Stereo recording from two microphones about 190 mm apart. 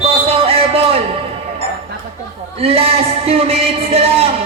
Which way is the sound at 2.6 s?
30° right (ahead or behind).